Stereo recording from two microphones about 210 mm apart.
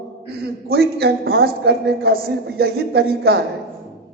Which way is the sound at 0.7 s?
50° right (ahead or behind).